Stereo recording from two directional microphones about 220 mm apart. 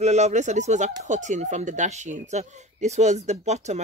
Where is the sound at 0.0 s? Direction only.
30° right (ahead or behind).